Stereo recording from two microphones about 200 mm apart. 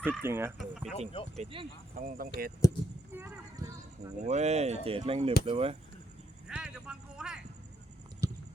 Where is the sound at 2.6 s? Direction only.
15° left (ahead or behind).